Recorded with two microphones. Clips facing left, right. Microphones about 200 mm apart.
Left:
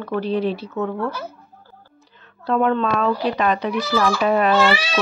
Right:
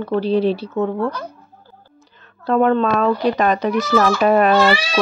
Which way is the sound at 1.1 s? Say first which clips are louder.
Right 2 dB; 5° left (ahead or behind).